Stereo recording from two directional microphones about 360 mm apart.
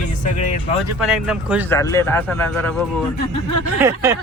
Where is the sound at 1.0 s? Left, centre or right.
Centre.